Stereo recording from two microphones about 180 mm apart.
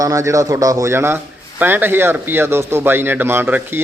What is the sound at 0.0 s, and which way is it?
A man's voice, 15° right (ahead or behind).